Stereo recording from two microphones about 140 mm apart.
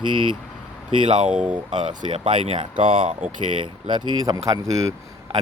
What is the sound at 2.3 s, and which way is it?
Speech, 40° right (ahead or behind).